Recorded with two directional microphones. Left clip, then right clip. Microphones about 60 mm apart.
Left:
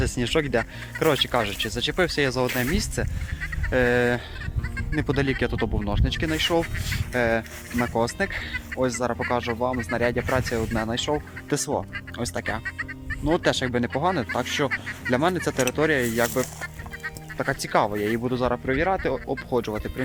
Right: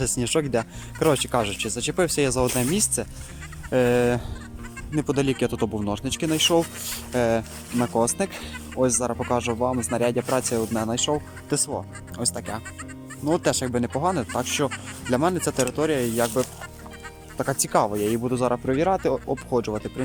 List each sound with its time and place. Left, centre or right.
0.0 s speech: right
3.7 s speech: right
11.1 s speech: centre
14.7 s speech: right
15.1 s speech: right